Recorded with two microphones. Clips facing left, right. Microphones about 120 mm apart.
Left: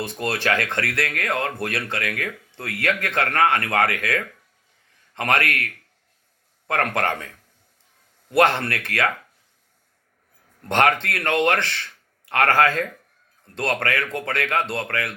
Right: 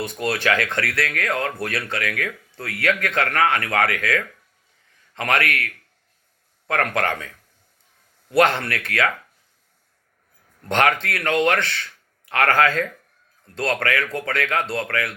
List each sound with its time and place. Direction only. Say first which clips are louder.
0.0 s speech: right 2 dB; 25° left (ahead or behind)
5.2 s speech: even; 25° left (ahead or behind)
10.7 s speech: even; 25° left (ahead or behind)